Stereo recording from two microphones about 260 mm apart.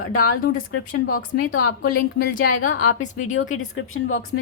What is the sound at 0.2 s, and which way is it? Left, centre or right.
Speech, left.